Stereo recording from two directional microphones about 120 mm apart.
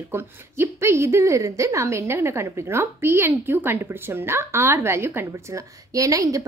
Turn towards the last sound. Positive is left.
turn(degrees=-30)  # may be behind; listen again after turning